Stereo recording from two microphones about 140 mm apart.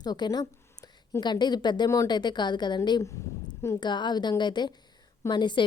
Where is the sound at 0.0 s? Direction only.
30° left (ahead or behind).